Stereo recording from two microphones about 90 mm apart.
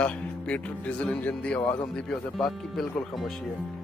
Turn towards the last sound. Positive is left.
turn(degrees=0)  # may be behind; listen again after turning